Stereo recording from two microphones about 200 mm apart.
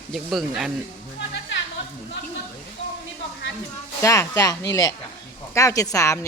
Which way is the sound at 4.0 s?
15° left (ahead or behind).